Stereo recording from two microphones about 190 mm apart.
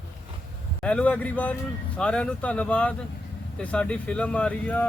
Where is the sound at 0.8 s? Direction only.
5° left (ahead or behind).